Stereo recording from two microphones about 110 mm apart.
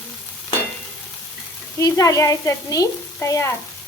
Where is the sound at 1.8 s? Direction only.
30° left (ahead or behind).